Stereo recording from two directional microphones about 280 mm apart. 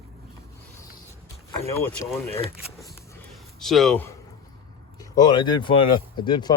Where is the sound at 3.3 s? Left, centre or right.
Centre.